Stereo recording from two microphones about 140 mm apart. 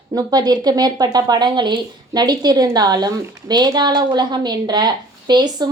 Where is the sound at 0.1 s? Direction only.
30° right (ahead or behind).